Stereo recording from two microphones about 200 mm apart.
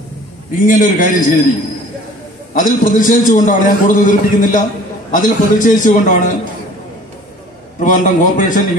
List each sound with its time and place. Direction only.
0.5 s a man's voice: 40° left (ahead or behind)
2.5 s a man's voice: 40° left (ahead or behind)
7.8 s a man's voice: 40° left (ahead or behind)